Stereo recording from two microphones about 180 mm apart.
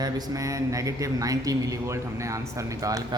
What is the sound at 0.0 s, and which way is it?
Speech, 20° right (ahead or behind).